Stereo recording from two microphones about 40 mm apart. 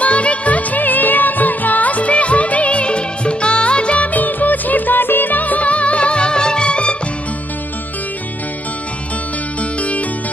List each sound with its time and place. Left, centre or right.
0.0 s music: left
9.6 s music: left